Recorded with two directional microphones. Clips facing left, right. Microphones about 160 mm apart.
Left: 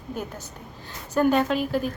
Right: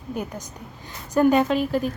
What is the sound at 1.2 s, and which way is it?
Speech, 5° right (ahead or behind).